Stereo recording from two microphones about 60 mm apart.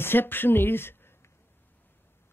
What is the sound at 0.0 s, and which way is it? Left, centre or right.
Speech, left.